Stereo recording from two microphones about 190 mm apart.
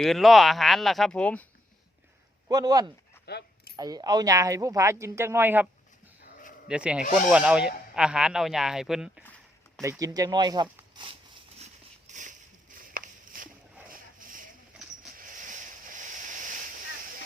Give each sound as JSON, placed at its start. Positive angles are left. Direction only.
{"t": 0.0, "sound": "speech", "side_deg": 0}
{"t": 2.5, "sound": "speech", "side_deg": -20}
{"t": 3.2, "sound": "keys jangling", "side_deg": 60}
{"t": 3.8, "sound": "speech", "side_deg": -20}
{"t": 6.2, "sound": "sheep", "side_deg": 45}
{"t": 6.7, "sound": "speech", "side_deg": -5}
{"t": 9.8, "sound": "speech", "side_deg": -15}
{"t": 12.0, "sound": "a sound", "side_deg": -40}